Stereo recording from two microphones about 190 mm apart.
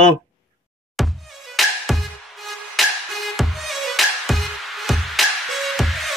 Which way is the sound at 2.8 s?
Centre (ahead or behind).